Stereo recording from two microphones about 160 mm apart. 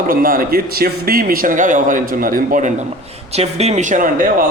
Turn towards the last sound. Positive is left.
turn(degrees=-55)  # may be behind; listen again after turning